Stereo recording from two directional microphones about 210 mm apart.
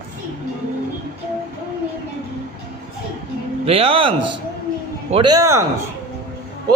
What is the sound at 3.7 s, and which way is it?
Speech, 25° right (ahead or behind).